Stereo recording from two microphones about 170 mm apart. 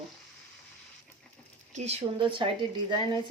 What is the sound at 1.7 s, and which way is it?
Speech, 40° right (ahead or behind).